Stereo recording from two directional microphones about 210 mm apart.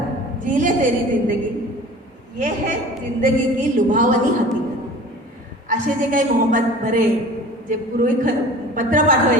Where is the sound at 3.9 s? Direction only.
40° right (ahead or behind).